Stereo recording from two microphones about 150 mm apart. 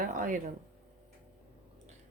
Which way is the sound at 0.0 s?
60° right (ahead or behind).